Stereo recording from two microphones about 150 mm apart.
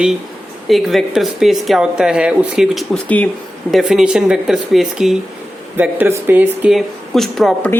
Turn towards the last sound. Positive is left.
turn(degrees=0)  # may be behind; listen again after turning